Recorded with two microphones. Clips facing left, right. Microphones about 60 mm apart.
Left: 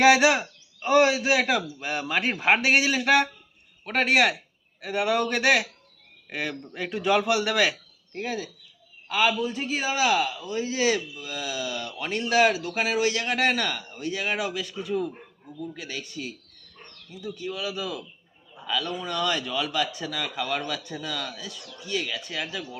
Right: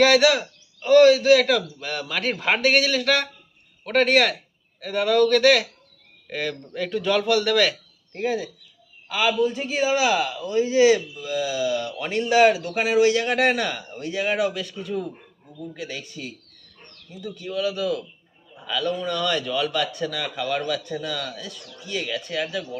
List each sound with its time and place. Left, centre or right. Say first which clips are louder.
0.0 s a man's voice: right 1 dB; centre
3.8 s a man's voice: right 3 dB; centre
8.1 s a man's voice: right 6 dB; centre
11.9 s a man's voice: right 4 dB; centre
18.5 s a sound: right 1 dB; centre
18.9 s a man's voice: right 6 dB; centre